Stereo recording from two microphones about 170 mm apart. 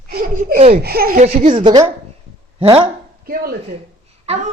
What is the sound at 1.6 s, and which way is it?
Speech, 25° right (ahead or behind).